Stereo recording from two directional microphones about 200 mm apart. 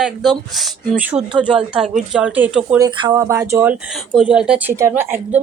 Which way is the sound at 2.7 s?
20° right (ahead or behind).